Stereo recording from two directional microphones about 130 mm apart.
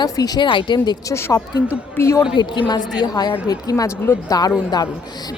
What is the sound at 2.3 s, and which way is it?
A woman's voice, 35° left (ahead or behind).